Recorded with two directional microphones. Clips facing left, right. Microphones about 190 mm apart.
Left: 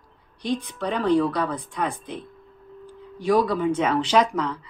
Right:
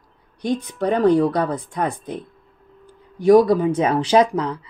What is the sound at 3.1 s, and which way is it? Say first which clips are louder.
Speech: right 8 dB; 45° right (ahead or behind).